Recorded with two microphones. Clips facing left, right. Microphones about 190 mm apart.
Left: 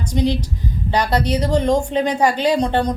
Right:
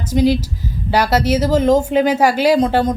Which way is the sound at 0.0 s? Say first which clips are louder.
Right 5 dB; 5° right (ahead or behind).